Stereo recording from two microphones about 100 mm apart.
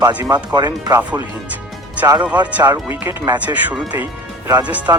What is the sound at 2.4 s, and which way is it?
Speech, 15° right (ahead or behind).